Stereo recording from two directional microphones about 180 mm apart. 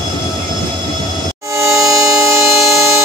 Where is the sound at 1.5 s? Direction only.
15° right (ahead or behind).